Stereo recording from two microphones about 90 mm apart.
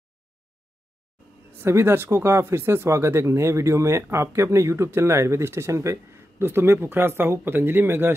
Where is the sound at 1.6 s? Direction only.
30° right (ahead or behind).